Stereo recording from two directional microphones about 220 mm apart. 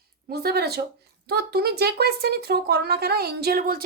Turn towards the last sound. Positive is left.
turn(degrees=-40)  # may be behind; listen again after turning